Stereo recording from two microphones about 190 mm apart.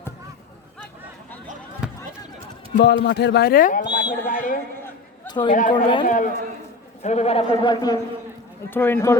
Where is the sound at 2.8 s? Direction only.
65° left (ahead or behind); by 8.0 s 20° left (ahead or behind).